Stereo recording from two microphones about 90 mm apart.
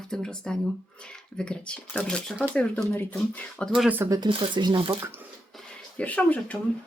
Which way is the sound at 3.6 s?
10° left (ahead or behind).